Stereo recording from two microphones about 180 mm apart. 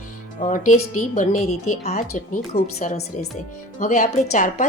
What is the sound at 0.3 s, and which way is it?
A woman's voice, 45° left (ahead or behind).